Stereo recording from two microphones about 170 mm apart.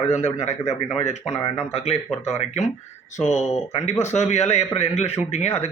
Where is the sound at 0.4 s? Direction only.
40° left (ahead or behind).